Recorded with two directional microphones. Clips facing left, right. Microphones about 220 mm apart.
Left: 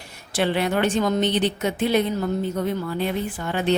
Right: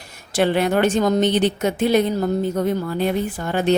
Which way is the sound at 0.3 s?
45° right (ahead or behind).